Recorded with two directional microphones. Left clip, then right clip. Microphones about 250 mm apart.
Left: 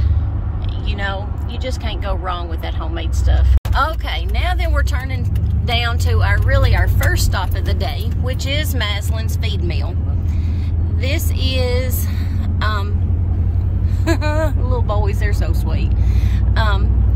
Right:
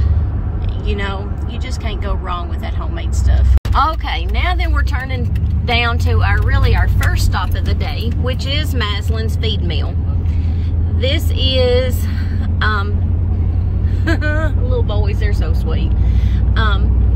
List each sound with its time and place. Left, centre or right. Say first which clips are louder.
0.8 s speech: right 1 dB; centre
3.7 s speech: right 3 dB; centre
11.0 s speech: right 5 dB; centre
14.0 s speech: even; centre
14.9 s speech: left 1 dB; centre
16.5 s speech: right 1 dB; centre